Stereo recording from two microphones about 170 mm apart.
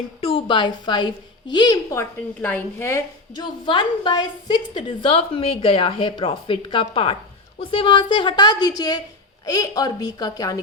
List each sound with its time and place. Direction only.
0.2 s a woman's voice: 35° left (ahead or behind); by 3.0 s 15° left (ahead or behind)
3.3 s a woman's voice: 30° left (ahead or behind)